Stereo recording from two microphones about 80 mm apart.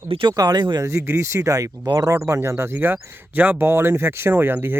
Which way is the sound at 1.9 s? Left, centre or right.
Right.